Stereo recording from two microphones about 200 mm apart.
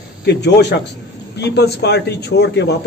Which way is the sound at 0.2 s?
60° left (ahead or behind).